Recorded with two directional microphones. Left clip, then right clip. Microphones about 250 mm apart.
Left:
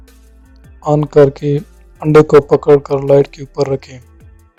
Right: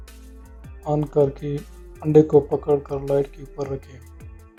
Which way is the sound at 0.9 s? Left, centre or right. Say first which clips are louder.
Left 11 dB; left.